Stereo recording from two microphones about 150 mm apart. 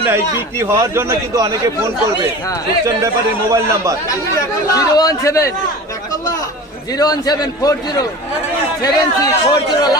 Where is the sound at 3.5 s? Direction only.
20° right (ahead or behind).